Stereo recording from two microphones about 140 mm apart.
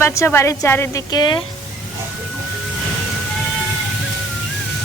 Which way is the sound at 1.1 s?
30° left (ahead or behind).